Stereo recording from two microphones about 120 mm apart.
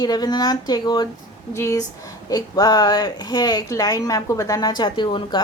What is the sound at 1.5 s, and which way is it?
A woman's voice, 25° left (ahead or behind).